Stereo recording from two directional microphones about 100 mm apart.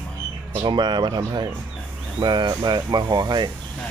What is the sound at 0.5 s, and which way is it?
Speech, 50° right (ahead or behind).